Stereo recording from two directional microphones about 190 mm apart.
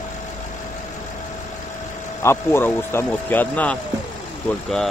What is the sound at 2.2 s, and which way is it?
Speech, 15° left (ahead or behind).